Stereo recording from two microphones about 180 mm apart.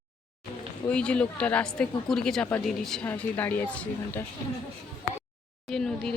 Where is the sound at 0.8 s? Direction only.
5° left (ahead or behind).